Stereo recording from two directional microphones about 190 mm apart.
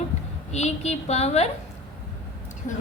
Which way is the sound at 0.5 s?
35° left (ahead or behind).